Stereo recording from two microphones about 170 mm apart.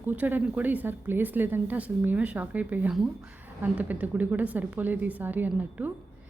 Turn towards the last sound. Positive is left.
turn(degrees=-10)  # may be behind; listen again after turning